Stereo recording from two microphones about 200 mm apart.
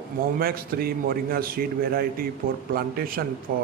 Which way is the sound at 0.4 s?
50° right (ahead or behind).